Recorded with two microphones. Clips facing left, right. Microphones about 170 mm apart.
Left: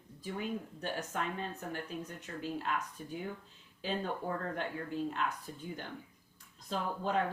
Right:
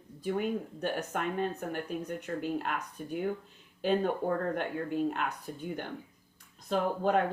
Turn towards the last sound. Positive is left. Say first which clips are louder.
# right 6 dB
turn(degrees=-60)  # may be behind; listen again after turning